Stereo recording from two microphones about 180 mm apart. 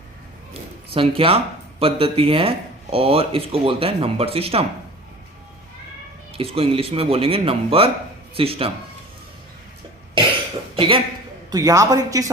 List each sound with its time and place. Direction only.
0.9 s speech: 30° right (ahead or behind)
6.3 s speech: 30° right (ahead or behind)
10.8 s a man's voice: 30° right (ahead or behind)
11.5 s a man's voice: 20° right (ahead or behind)